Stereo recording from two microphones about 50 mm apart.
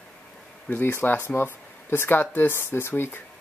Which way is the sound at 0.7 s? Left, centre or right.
Left.